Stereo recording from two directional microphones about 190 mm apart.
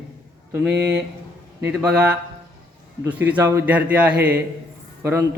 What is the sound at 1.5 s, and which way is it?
A man's voice, 10° right (ahead or behind).